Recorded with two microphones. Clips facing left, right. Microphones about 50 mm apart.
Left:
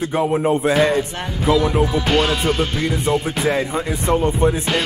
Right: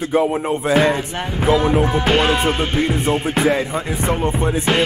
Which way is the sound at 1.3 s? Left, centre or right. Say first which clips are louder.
Right 1 dB; right.